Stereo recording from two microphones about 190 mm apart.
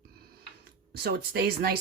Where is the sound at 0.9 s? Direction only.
55° right (ahead or behind).